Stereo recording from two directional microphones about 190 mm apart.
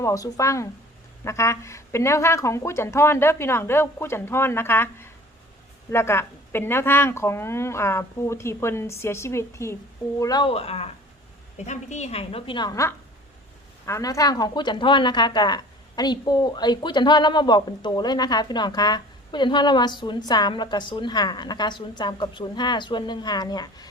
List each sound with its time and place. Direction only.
0.0 s a woman's voice: 15° left (ahead or behind)